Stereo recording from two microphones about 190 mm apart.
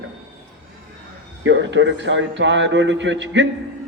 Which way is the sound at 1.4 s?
70° right (ahead or behind).